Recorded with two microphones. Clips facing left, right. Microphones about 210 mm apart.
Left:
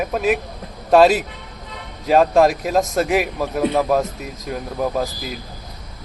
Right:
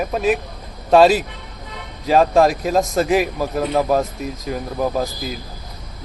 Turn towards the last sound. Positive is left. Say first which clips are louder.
# right 1 dB
turn(degrees=0)  # may be behind; listen again after turning